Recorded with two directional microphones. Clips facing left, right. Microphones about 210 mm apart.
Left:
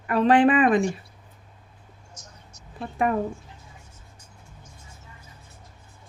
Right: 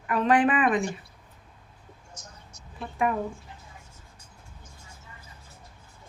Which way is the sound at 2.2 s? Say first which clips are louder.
Even; 55° right (ahead or behind).